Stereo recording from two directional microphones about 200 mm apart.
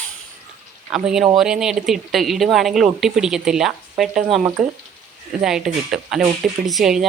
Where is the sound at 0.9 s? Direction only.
5° right (ahead or behind).